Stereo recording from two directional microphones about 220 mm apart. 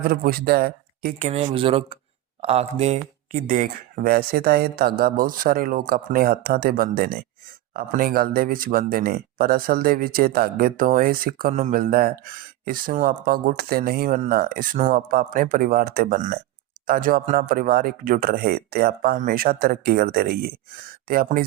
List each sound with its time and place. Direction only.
0.1 s speech: 40° right (ahead or behind)
1.3 s speech: 25° right (ahead or behind)